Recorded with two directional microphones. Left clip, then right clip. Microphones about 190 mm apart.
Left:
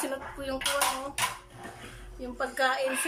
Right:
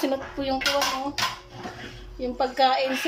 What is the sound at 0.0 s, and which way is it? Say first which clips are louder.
Speech: right 7 dB; 10° right (ahead or behind).